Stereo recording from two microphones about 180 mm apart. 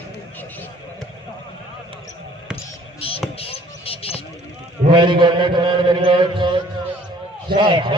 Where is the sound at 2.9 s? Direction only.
30° left (ahead or behind).